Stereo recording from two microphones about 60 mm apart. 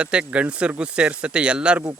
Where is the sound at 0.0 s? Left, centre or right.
Centre.